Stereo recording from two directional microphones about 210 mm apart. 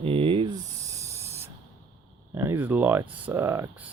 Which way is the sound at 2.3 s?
10° right (ahead or behind).